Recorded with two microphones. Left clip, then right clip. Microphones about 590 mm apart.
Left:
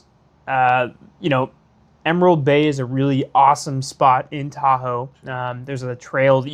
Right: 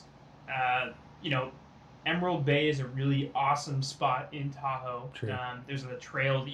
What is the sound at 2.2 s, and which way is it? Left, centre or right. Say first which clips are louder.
Speech: left 14 dB; left.